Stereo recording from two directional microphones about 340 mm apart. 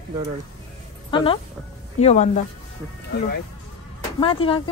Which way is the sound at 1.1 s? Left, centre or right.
Centre.